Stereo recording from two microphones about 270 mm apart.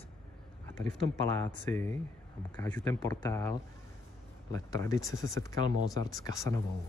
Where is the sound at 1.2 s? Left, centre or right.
Centre.